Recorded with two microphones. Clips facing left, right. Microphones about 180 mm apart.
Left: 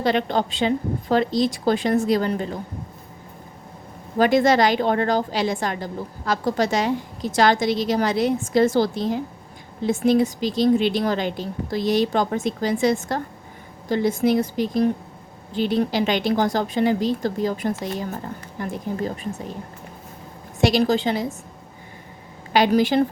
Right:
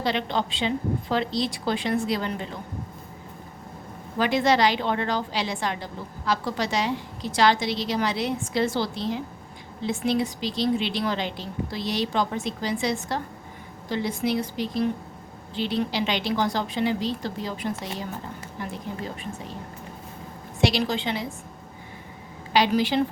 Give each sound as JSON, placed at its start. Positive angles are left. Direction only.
{"t": 0.0, "sound": "a woman's voice", "side_deg": 50}
{"t": 4.2, "sound": "a woman's voice", "side_deg": 45}
{"t": 20.6, "sound": "a woman's voice", "side_deg": 45}
{"t": 22.5, "sound": "a woman's voice", "side_deg": 50}